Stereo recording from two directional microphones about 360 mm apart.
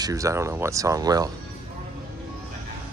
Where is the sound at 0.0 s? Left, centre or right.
Centre.